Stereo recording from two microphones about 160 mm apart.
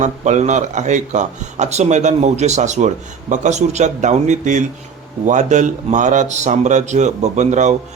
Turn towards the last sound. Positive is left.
turn(degrees=-50)  # may be behind; listen again after turning